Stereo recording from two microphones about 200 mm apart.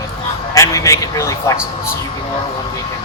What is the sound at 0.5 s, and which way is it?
A man's voice, 15° left (ahead or behind).